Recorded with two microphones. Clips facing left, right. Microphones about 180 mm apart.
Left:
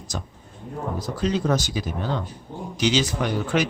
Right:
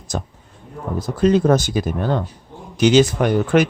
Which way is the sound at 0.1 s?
50° right (ahead or behind).